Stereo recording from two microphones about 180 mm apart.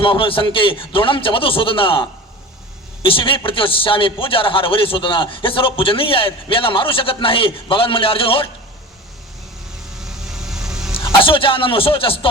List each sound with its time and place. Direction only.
0.0 s a man's voice: 30° left (ahead or behind)
10.0 s vehicle: centre (ahead or behind)
10.9 s a man's voice: 30° left (ahead or behind)